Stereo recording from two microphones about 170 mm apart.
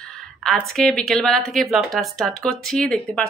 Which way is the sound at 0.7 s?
5° left (ahead or behind).